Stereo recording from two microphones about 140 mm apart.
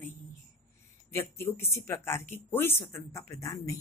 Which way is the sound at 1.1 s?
15° left (ahead or behind).